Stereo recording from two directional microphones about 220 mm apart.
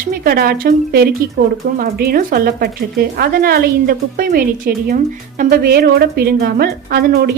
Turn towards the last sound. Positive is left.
turn(degrees=-45)  # may be behind; listen again after turning